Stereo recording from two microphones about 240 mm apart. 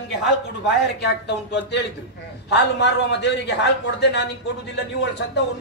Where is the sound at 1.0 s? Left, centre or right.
Left.